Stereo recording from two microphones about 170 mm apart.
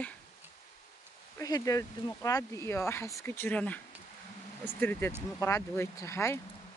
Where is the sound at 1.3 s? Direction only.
20° left (ahead or behind).